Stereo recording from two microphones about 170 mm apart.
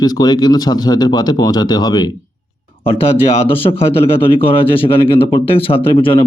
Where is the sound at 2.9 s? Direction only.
35° left (ahead or behind).